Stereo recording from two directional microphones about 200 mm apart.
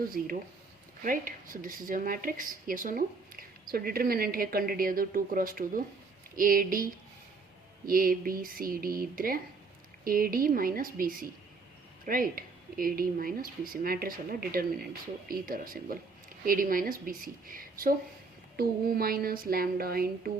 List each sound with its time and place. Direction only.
1.0 s speech: 45° right (ahead or behind)